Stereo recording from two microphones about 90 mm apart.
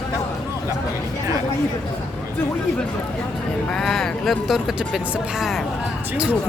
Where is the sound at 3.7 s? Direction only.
5° left (ahead or behind).